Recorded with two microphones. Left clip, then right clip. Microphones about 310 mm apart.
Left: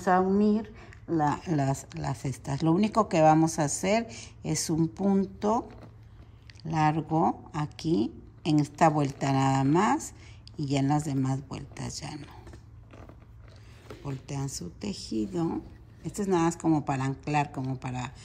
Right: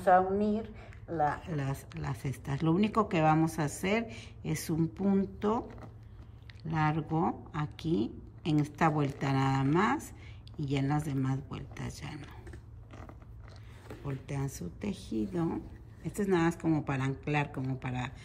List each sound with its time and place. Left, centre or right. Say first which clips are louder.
0.0 s a woman's voice: left 1 dB; left
1.5 s speech: left 9 dB; centre
14.0 s speech: left 2 dB; centre